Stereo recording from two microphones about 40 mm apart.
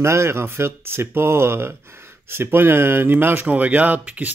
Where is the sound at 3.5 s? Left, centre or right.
Right.